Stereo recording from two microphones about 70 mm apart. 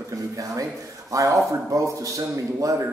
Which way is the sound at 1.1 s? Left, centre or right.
Right.